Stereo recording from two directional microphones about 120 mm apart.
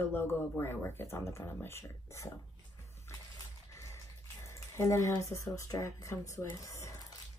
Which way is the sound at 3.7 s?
25° left (ahead or behind).